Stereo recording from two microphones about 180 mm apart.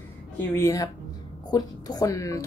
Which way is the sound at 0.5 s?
15° left (ahead or behind).